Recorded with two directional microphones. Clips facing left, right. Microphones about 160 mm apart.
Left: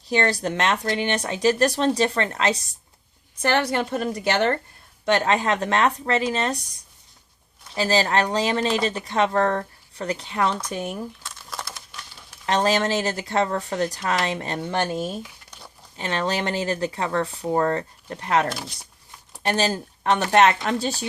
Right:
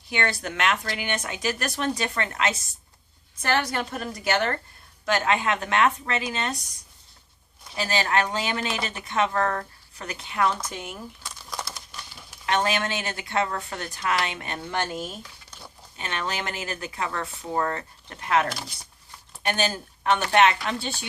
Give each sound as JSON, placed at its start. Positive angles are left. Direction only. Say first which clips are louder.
{"t": 0.1, "sound": "speech", "louder": "left 6 dB", "side_deg": 35}
{"t": 7.8, "sound": "speech", "louder": "left 4 dB", "side_deg": 30}
{"t": 11.2, "sound": "crumpling", "louder": "even", "side_deg": 0}
{"t": 12.5, "sound": "speech", "louder": "left 4 dB", "side_deg": 30}